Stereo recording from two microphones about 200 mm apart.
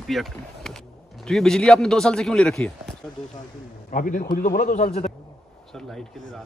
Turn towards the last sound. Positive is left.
turn(degrees=0)  # may be behind; listen again after turning